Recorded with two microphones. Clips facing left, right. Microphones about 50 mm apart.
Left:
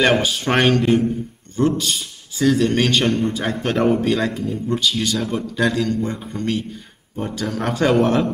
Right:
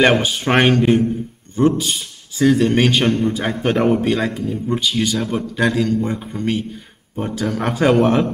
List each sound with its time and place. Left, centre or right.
0.0 s a man's voice: centre